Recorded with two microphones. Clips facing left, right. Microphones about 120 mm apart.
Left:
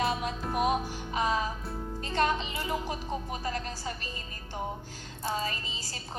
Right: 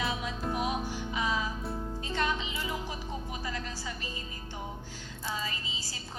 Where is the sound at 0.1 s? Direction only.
50° left (ahead or behind).